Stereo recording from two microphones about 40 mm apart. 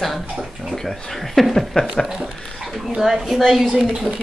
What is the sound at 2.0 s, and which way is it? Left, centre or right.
Speech, centre.